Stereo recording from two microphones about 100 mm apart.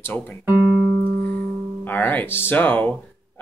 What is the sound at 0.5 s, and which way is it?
Music, 20° right (ahead or behind).